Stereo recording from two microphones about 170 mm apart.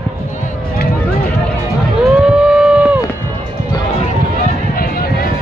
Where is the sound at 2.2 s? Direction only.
5° right (ahead or behind).